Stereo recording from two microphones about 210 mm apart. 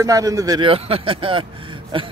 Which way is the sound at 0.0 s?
15° right (ahead or behind).